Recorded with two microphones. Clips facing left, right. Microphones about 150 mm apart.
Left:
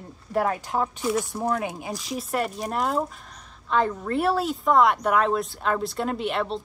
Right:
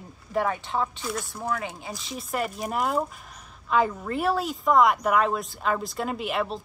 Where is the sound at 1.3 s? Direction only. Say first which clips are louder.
Left 4 dB; 20° left (ahead or behind).